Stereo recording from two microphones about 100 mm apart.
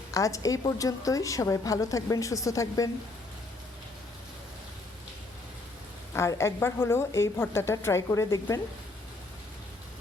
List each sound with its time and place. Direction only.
0.1 s a woman's voice: 35° left (ahead or behind)
6.1 s a woman's voice: 30° left (ahead or behind)